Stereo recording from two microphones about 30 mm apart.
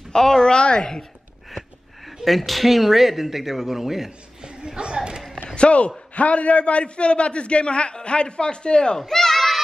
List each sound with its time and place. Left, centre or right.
0.1 s a woman's voice: centre
0.5 s a man's voice: left
2.0 s a man's voice: centre
4.4 s a sound: right
5.5 s a man's voice: left
9.0 s a sound: centre